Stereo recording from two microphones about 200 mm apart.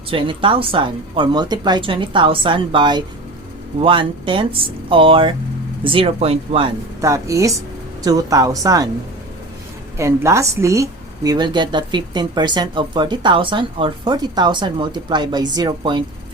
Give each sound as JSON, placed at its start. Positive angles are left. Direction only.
{"t": 0.1, "sound": "a woman's voice", "side_deg": -25}
{"t": 7.0, "sound": "a woman's voice", "side_deg": -15}
{"t": 10.0, "sound": "a woman's voice", "side_deg": -15}